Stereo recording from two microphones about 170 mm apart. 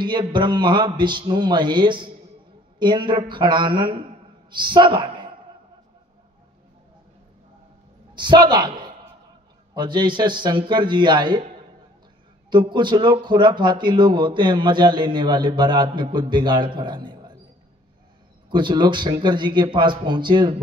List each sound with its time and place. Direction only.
0.0 s a woman's voice: 25° right (ahead or behind)
8.1 s a man's voice: 25° right (ahead or behind)
12.4 s speech: 25° right (ahead or behind)
18.5 s speech: 25° right (ahead or behind)